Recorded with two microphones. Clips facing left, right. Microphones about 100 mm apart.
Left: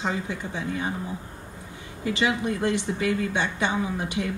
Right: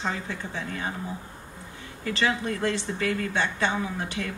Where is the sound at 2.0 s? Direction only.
15° left (ahead or behind).